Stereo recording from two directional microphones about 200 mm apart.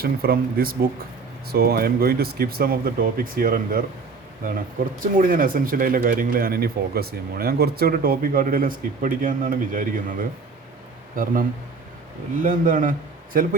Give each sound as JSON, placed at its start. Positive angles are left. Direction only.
{"t": 0.0, "sound": "speech", "side_deg": -50}
{"t": 5.1, "sound": "speech", "side_deg": -45}
{"t": 12.4, "sound": "a man's voice", "side_deg": -40}